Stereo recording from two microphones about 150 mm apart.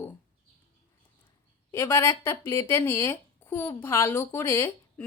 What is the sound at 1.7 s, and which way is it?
Speech, 20° left (ahead or behind).